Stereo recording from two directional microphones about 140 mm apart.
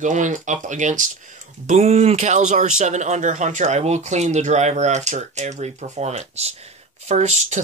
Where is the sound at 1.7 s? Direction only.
50° right (ahead or behind).